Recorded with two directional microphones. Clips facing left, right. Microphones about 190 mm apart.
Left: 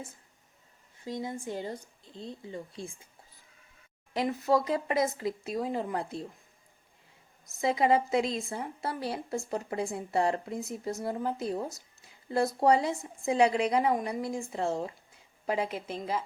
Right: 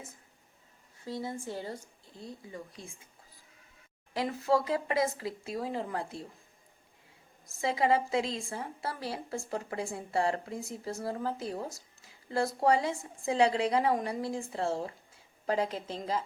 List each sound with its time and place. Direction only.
1.0 s a woman's voice: 15° left (ahead or behind)
4.1 s a woman's voice: 20° left (ahead or behind)
7.6 s a woman's voice: 20° left (ahead or behind)